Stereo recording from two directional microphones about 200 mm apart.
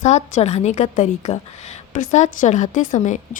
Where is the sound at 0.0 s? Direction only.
35° left (ahead or behind).